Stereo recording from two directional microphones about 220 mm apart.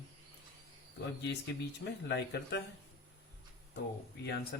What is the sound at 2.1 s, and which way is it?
Speech, 50° left (ahead or behind).